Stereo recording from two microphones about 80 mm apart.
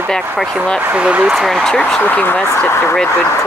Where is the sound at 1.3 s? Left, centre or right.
Centre.